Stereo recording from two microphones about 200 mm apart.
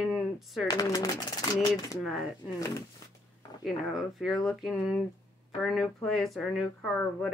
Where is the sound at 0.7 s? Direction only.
20° left (ahead or behind).